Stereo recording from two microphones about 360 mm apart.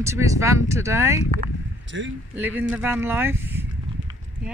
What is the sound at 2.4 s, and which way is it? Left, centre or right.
Speech, centre.